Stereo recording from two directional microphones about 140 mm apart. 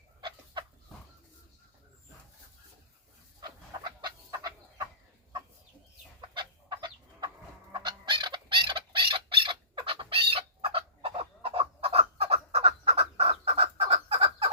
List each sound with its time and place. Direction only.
0.2 s chicken: 35° right (ahead or behind)
3.4 s chicken: 30° right (ahead or behind)
6.2 s chicken: 35° right (ahead or behind)
7.7 s bird: 35° right (ahead or behind)